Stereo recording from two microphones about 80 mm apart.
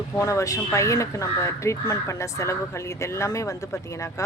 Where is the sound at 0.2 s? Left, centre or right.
Left.